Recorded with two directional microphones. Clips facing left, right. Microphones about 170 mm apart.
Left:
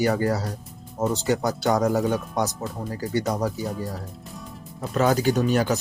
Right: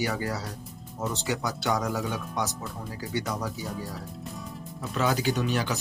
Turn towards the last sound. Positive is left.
turn(degrees=45)  # may be behind; listen again after turning